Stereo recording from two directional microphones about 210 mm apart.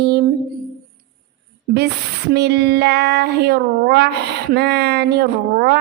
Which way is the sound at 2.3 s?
50° right (ahead or behind).